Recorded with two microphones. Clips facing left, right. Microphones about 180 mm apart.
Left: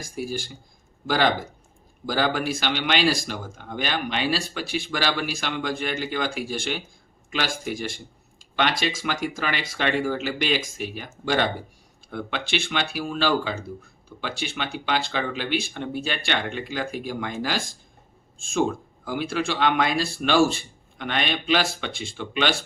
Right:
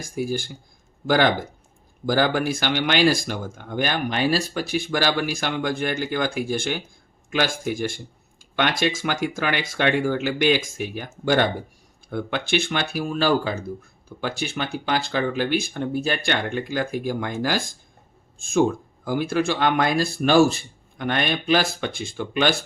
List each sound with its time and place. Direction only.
1.0 s speech: 50° right (ahead or behind)
19.0 s speech: 45° right (ahead or behind)